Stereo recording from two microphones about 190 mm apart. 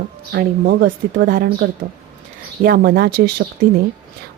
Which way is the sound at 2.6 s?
55° right (ahead or behind).